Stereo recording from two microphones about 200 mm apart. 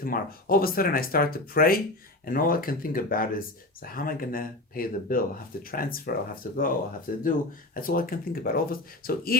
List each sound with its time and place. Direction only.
0.0 s speech: 45° left (ahead or behind)